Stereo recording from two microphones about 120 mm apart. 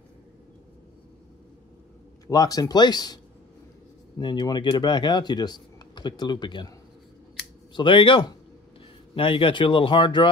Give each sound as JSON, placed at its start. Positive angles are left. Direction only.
{"t": 2.2, "sound": "speech", "side_deg": 30}
{"t": 4.2, "sound": "speech", "side_deg": 35}
{"t": 7.7, "sound": "speech", "side_deg": 45}